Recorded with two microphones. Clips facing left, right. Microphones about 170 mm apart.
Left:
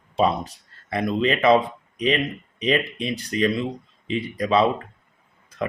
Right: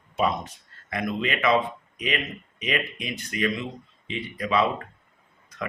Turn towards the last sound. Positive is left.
turn(degrees=30)  # may be behind; listen again after turning